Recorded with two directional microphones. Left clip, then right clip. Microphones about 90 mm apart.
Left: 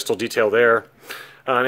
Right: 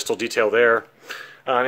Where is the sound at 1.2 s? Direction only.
60° left (ahead or behind).